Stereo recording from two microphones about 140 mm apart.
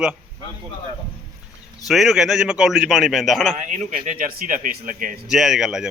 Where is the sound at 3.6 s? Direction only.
60° right (ahead or behind); by 5.1 s 75° right (ahead or behind).